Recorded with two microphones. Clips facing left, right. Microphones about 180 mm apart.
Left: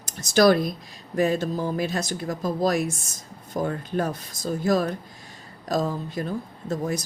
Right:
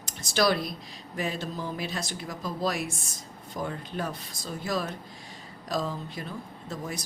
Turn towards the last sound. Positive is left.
turn(degrees=45)  # may be behind; listen again after turning